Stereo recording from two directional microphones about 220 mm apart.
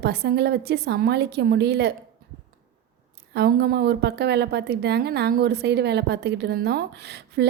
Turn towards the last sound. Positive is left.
turn(degrees=-50)  # may be behind; listen again after turning